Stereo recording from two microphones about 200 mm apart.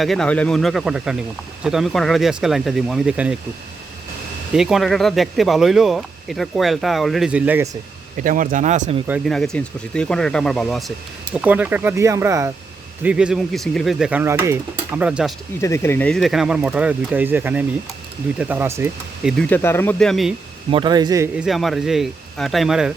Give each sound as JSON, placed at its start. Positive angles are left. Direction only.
{"t": 0.0, "sound": "speech", "side_deg": 0}
{"t": 4.5, "sound": "speech", "side_deg": 0}
{"t": 8.2, "sound": "speech", "side_deg": -40}
{"t": 9.0, "sound": "speech", "side_deg": -5}
{"t": 15.6, "sound": "speech", "side_deg": 15}
{"t": 19.4, "sound": "speech", "side_deg": 10}
{"t": 20.7, "sound": "a man's voice", "side_deg": -25}
{"t": 21.3, "sound": "speech", "side_deg": 0}